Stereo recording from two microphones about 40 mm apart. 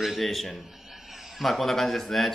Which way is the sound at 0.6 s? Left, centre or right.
Centre.